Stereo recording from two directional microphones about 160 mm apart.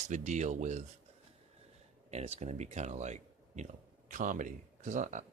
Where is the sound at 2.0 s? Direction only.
40° right (ahead or behind).